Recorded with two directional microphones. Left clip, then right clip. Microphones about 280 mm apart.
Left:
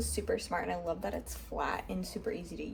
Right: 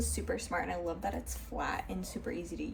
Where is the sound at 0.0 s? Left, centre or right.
Centre.